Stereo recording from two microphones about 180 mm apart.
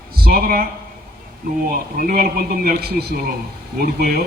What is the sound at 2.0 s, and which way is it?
A man's voice, 50° right (ahead or behind).